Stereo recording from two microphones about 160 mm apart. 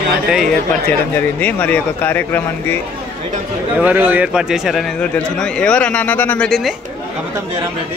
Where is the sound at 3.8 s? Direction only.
10° right (ahead or behind).